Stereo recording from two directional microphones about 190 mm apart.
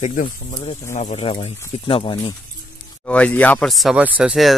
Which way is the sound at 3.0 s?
5° left (ahead or behind).